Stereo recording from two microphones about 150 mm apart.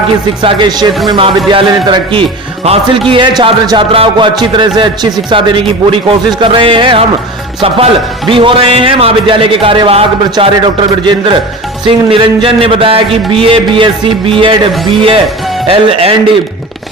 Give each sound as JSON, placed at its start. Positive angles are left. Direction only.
{"t": 0.4, "sound": "speech", "side_deg": -30}
{"t": 2.6, "sound": "speech", "side_deg": -45}
{"t": 8.3, "sound": "speech", "side_deg": -35}